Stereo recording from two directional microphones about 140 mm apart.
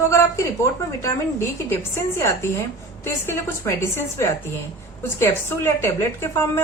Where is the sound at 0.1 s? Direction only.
20° left (ahead or behind).